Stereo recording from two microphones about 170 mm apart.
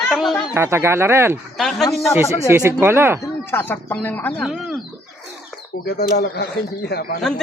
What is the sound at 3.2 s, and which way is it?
A woman's voice, 10° left (ahead or behind).